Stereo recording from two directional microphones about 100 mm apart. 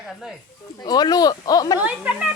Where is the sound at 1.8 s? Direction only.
15° right (ahead or behind).